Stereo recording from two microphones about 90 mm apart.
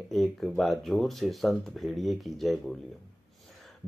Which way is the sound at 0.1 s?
Centre (ahead or behind).